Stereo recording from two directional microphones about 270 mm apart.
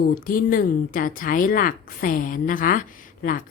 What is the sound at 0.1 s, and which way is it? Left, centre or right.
A woman's voice, left.